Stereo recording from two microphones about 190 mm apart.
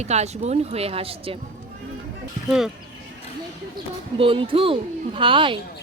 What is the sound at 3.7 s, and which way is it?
Speech, 25° right (ahead or behind).